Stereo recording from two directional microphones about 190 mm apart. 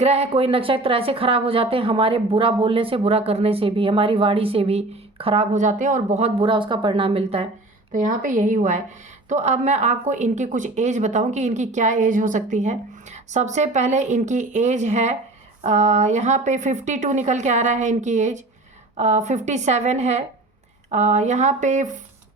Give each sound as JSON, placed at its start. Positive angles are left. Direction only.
{"t": 0.0, "sound": "a woman's voice", "side_deg": -35}
{"t": 7.9, "sound": "speech", "side_deg": -40}